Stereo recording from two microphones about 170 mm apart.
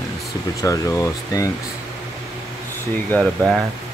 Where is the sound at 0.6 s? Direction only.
20° left (ahead or behind).